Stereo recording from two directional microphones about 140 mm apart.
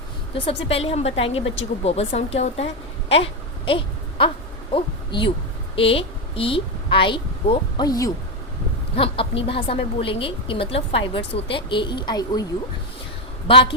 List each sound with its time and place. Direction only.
0.3 s a woman's voice: 45° left (ahead or behind)
3.7 s a sound: 40° left (ahead or behind)
4.7 s a woman's voice: 35° left (ahead or behind)
7.9 s speech: 25° left (ahead or behind)
9.0 s a woman's voice: 40° left (ahead or behind)